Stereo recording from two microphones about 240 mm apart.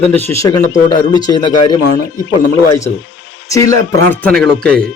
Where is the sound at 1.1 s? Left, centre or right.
Centre.